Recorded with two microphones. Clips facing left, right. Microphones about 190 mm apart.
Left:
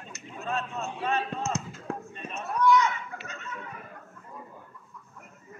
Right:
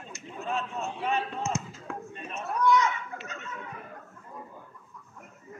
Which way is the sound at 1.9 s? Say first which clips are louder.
Left 3 dB; 35° left (ahead or behind).